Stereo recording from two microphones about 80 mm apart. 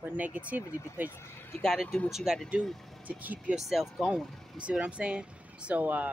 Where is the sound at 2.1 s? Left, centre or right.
Centre.